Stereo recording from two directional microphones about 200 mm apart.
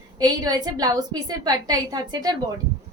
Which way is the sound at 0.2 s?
20° right (ahead or behind).